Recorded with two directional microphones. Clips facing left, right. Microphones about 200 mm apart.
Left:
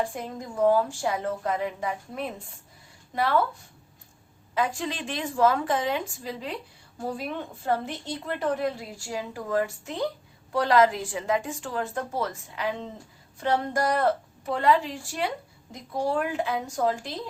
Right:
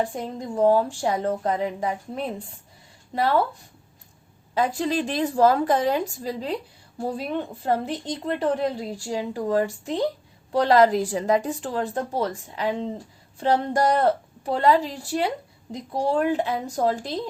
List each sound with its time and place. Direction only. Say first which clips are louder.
0.2 s a woman's voice: right 3 dB; 30° right (ahead or behind)
4.5 s a woman's voice: right 5 dB; 35° right (ahead or behind)